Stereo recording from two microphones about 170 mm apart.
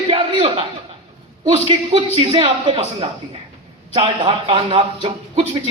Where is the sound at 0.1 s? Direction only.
35° right (ahead or behind).